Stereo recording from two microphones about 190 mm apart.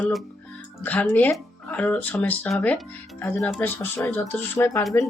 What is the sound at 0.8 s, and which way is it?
Speech, 10° left (ahead or behind).